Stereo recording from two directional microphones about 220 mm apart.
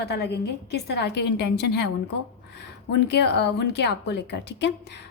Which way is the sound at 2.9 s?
50° left (ahead or behind).